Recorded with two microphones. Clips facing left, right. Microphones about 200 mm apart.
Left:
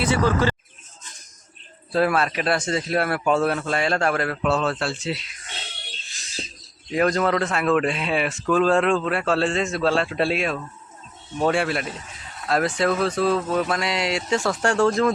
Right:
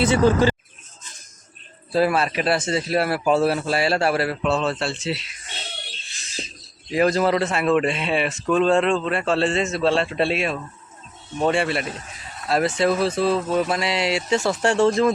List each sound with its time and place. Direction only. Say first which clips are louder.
0.0 s speech: right 4 dB; 20° right (ahead or behind)
1.9 s a man's voice: right 1 dB; 5° right (ahead or behind)
6.9 s a man's voice: right 2 dB; 5° right (ahead or behind)